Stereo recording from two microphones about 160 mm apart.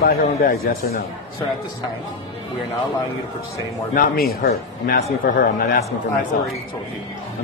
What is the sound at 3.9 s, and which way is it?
Speech, 65° left (ahead or behind).